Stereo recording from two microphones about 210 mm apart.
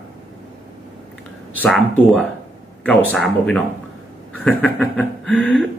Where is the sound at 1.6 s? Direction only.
5° left (ahead or behind).